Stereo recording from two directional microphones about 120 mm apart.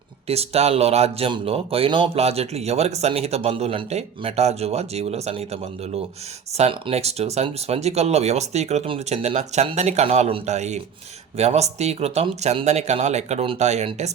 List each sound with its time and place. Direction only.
0.3 s speech: 60° right (ahead or behind)
2.1 s speech: 60° right (ahead or behind)